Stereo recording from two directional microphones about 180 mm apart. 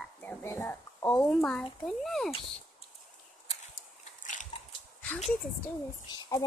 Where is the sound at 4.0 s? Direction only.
45° left (ahead or behind).